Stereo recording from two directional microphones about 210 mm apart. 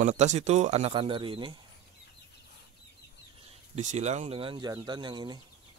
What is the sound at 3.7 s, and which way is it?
Speech, 35° right (ahead or behind).